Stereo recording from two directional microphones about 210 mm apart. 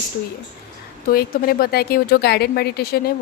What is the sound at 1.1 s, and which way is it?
Speech, 45° left (ahead or behind).